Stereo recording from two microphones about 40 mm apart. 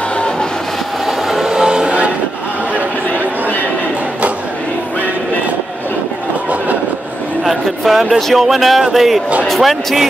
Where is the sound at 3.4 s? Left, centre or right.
Left.